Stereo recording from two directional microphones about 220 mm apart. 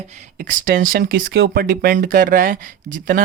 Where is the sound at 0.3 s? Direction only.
40° right (ahead or behind).